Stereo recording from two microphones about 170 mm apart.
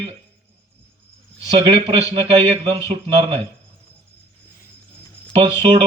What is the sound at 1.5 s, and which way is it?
Speech, 30° right (ahead or behind).